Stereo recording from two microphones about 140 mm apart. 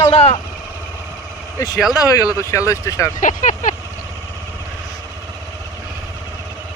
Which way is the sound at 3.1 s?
65° left (ahead or behind).